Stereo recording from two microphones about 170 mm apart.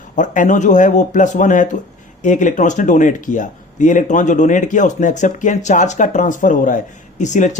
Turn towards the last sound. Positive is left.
turn(degrees=45)  # may be behind; listen again after turning